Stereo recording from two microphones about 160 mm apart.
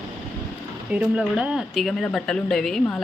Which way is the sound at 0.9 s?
5° right (ahead or behind).